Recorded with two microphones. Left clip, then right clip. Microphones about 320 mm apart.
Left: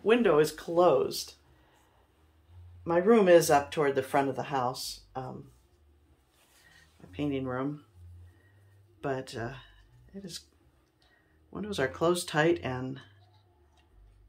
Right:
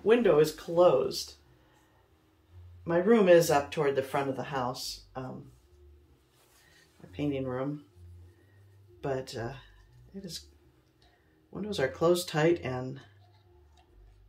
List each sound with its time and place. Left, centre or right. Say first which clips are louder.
0.0 s speech: right 1 dB; centre
2.8 s speech: left 1 dB; centre
7.1 s speech: even; centre
9.0 s speech: even; centre
11.5 s speech: even; centre